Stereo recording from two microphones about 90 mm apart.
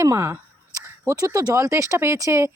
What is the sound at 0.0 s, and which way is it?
Speech, 30° right (ahead or behind).